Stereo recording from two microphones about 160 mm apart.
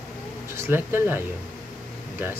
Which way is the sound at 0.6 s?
15° right (ahead or behind).